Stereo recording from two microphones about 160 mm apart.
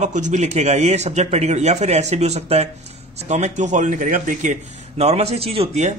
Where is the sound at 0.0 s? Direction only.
50° right (ahead or behind).